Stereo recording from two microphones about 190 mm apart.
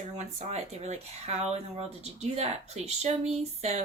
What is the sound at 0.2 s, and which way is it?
Speech, 35° right (ahead or behind).